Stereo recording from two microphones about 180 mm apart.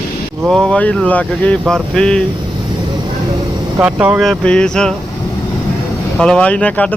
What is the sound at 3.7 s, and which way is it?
Speech, 10° right (ahead or behind).